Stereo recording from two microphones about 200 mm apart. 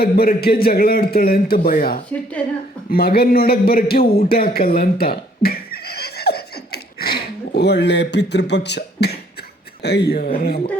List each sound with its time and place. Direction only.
0.0 s a man's voice: 50° left (ahead or behind)
4.3 s a sound: 50° left (ahead or behind)
9.8 s a man's voice: 55° left (ahead or behind)